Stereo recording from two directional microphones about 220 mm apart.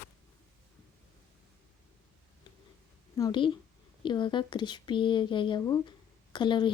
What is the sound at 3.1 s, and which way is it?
A woman's voice, 20° left (ahead or behind).